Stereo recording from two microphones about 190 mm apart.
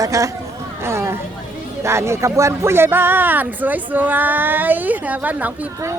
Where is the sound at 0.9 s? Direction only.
15° right (ahead or behind).